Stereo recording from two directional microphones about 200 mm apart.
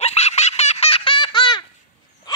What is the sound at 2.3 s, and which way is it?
Dog, 20° left (ahead or behind).